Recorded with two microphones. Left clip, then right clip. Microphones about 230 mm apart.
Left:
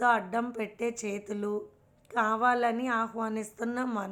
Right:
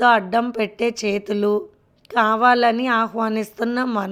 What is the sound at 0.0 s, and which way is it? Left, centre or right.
Speech, right.